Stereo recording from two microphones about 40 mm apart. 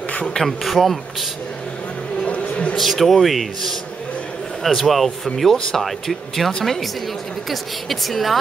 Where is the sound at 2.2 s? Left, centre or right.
Left.